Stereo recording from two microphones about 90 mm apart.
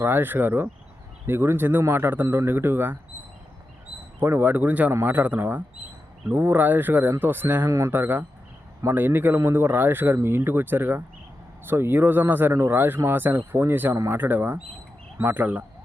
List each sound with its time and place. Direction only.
0.0 s a man's voice: 25° right (ahead or behind)
4.2 s a man's voice: 25° right (ahead or behind)
13.9 s speech: 35° right (ahead or behind)
14.2 s a man's voice: 20° right (ahead or behind)